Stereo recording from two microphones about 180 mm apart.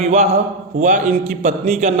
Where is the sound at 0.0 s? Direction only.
35° right (ahead or behind).